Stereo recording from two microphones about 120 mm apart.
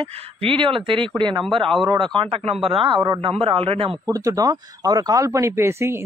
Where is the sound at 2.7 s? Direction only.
45° right (ahead or behind).